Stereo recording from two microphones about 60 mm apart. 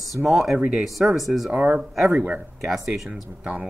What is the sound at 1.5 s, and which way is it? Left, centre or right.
Speech, right.